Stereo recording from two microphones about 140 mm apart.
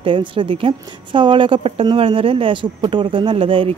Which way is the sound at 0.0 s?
35° right (ahead or behind).